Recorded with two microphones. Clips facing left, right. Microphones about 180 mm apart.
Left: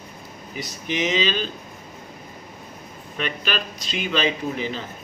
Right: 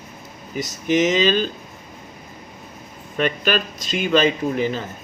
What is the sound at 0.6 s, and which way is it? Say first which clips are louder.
Speech: right 7 dB; 45° right (ahead or behind).